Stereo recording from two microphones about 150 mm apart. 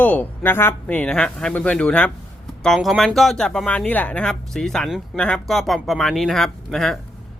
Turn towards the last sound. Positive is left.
turn(degrees=0)  # may be behind; listen again after turning